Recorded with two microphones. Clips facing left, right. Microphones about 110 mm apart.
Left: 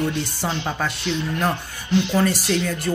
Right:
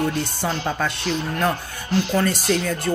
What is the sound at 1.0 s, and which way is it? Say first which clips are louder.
Speech: even; 40° right (ahead or behind).